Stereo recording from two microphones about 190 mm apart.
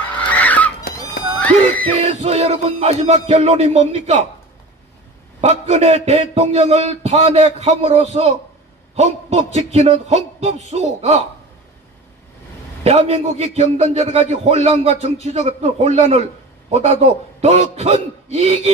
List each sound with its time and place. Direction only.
0.3 s a sound: 10° left (ahead or behind)
1.4 s music: 10° left (ahead or behind)
2.2 s a man's voice: 35° right (ahead or behind)
5.4 s a man's voice: 35° right (ahead or behind)
12.8 s a man's voice: 35° right (ahead or behind)